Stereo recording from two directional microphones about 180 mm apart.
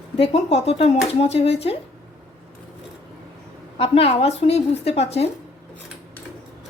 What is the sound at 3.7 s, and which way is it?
A woman's voice, 30° left (ahead or behind).